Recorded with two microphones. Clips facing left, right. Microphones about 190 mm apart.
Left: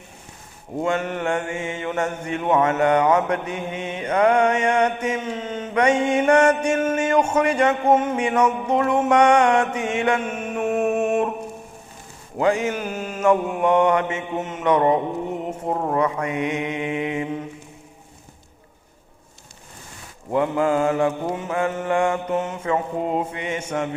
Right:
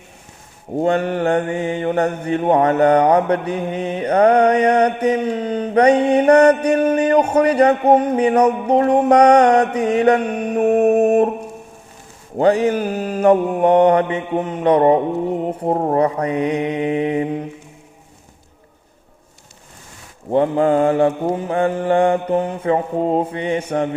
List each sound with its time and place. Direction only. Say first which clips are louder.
0.8 s mantra: right 6 dB; 35° right (ahead or behind)
12.4 s mantra: right 6 dB; 35° right (ahead or behind)
20.3 s mantra: right 5 dB; 35° right (ahead or behind)